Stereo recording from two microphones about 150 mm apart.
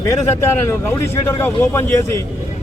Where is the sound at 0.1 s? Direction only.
15° left (ahead or behind).